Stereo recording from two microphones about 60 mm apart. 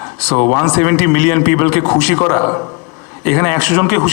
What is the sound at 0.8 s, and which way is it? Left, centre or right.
A man's voice, left.